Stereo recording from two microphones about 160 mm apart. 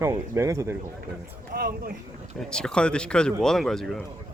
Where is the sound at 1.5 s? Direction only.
70° right (ahead or behind).